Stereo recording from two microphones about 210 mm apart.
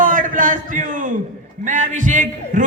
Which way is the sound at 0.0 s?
40° right (ahead or behind).